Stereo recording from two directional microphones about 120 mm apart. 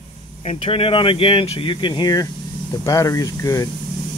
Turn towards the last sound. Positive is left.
turn(degrees=25)  # may be behind; listen again after turning